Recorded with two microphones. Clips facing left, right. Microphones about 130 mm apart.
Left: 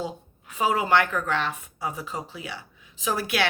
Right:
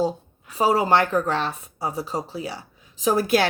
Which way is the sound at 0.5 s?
35° right (ahead or behind).